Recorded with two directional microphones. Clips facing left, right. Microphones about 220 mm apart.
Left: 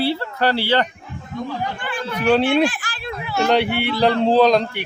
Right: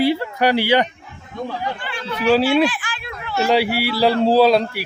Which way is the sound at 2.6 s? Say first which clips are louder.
Right 1 dB; 45° left (ahead or behind).